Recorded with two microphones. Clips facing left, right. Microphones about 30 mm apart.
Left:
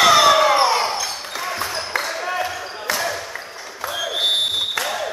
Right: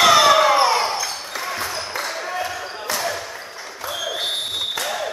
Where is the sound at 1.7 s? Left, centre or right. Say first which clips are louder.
Left 3 dB; left.